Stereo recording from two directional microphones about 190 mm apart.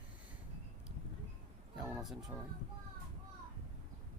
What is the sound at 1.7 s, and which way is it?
Speech, 5° right (ahead or behind).